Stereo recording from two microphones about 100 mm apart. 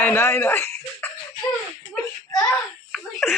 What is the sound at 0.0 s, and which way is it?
Speech, 25° left (ahead or behind).